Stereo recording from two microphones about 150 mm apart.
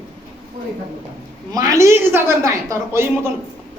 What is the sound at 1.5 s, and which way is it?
A man's voice, 25° right (ahead or behind).